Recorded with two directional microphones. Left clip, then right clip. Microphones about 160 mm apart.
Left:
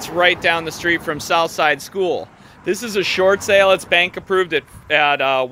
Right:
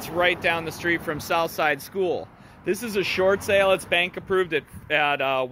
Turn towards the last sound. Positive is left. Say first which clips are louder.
# left 7 dB
turn(degrees=30)  # may be behind; listen again after turning